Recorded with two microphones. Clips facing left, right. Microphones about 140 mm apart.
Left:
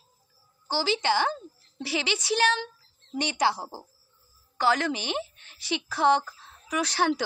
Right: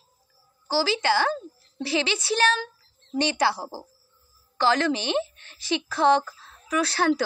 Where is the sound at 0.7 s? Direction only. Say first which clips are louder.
Right 3 dB; 20° left (ahead or behind).